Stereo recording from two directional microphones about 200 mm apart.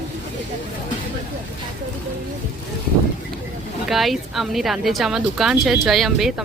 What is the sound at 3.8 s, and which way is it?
Speech, centre (ahead or behind).